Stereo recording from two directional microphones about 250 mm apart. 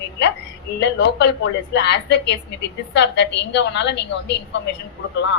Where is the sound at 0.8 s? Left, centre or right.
Left.